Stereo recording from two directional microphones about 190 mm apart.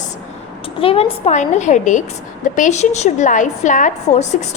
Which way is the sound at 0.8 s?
30° left (ahead or behind).